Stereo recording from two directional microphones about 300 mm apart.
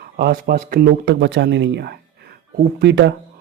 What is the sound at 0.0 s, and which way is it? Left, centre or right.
Speech, right.